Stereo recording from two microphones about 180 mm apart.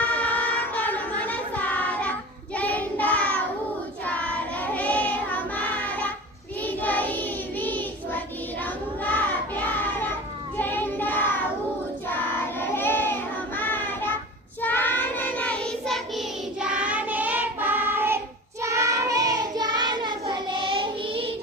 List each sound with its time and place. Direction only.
0.0 s child singing: 10° left (ahead or behind); by 21.3 s 30° right (ahead or behind)